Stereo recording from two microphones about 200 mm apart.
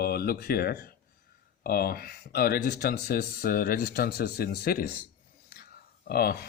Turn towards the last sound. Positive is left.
turn(degrees=50)  # may be behind; listen again after turning